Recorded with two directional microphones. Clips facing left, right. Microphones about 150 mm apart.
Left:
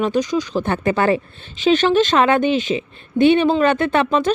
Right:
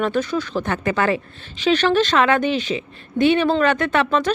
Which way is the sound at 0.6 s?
30° left (ahead or behind).